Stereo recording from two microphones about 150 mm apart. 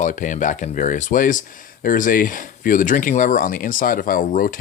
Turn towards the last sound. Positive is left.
turn(degrees=65)  # may be behind; listen again after turning